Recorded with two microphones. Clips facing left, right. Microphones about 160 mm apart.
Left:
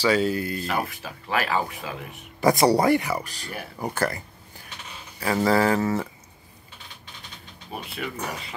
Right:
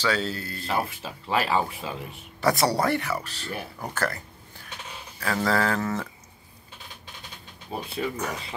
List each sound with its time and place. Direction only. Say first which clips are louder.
0.0 s speech: left 5 dB; 10° left (ahead or behind)
0.7 s speech: even; 30° right (ahead or behind)
2.4 s speech: left 4 dB; 15° left (ahead or behind)
5.2 s speech: left 4 dB; 10° left (ahead or behind)
7.7 s speech: right 2 dB; 20° right (ahead or behind)